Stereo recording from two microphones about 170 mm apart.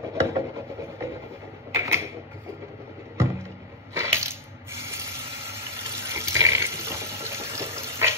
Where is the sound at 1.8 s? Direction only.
15° right (ahead or behind).